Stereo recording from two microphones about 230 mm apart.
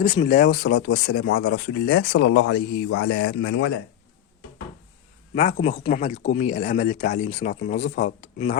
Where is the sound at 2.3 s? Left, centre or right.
Left.